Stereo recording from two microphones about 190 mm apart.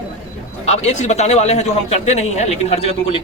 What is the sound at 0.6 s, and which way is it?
A man's voice, 35° left (ahead or behind).